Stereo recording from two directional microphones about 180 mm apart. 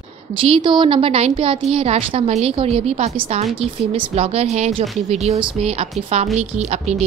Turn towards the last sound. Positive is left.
turn(degrees=-40)  # may be behind; listen again after turning